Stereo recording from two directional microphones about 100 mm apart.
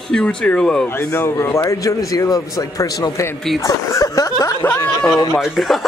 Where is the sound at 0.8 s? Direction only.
25° left (ahead or behind).